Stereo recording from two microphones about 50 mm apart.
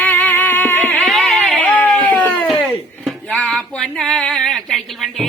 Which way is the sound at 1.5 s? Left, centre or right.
Left.